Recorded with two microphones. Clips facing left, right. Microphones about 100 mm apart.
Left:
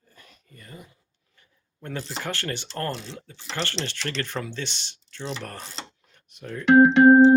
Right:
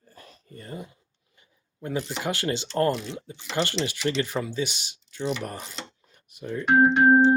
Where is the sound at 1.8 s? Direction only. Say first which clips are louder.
Right 4 dB; 10° right (ahead or behind).